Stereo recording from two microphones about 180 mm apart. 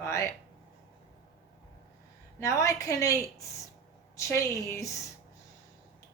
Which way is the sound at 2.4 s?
15° left (ahead or behind).